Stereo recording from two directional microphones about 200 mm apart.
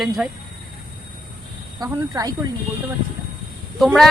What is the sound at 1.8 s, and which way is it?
Speech, 20° right (ahead or behind).